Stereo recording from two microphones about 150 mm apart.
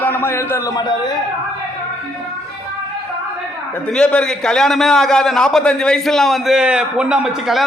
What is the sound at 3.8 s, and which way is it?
A man's voice, 5° left (ahead or behind).